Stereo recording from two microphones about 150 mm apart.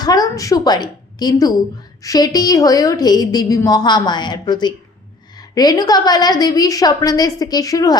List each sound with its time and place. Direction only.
0.0 s a woman's voice: 25° left (ahead or behind)